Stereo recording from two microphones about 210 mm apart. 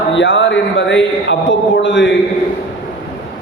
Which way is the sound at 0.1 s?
60° left (ahead or behind).